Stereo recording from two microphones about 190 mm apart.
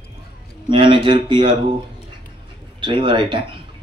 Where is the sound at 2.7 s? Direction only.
25° right (ahead or behind).